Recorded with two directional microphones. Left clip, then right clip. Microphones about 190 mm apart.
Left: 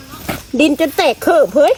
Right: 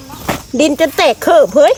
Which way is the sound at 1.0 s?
20° left (ahead or behind).